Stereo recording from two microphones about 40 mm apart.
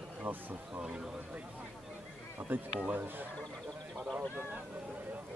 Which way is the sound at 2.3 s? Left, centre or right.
Right.